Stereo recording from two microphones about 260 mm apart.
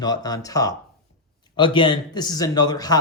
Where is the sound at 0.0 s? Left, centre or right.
Centre.